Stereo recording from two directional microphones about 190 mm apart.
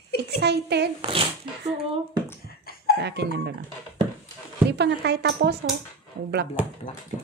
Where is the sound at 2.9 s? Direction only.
60° right (ahead or behind).